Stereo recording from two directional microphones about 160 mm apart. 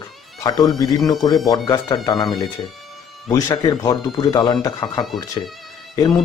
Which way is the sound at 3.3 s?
20° left (ahead or behind).